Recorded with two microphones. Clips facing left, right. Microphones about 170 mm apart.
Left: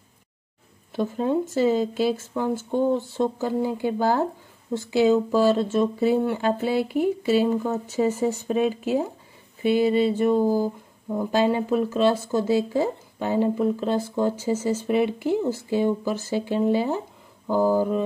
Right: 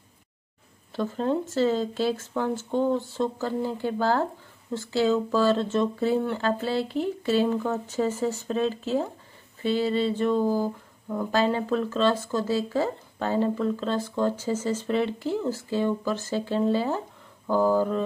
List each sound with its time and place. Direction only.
0.9 s speech: 15° left (ahead or behind)